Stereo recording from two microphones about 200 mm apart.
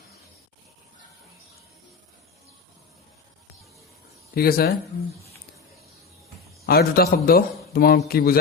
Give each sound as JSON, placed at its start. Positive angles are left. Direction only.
{"t": 4.4, "sound": "a man's voice", "side_deg": 50}
{"t": 6.7, "sound": "a man's voice", "side_deg": 50}